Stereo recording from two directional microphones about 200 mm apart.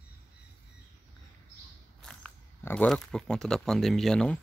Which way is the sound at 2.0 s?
5° left (ahead or behind).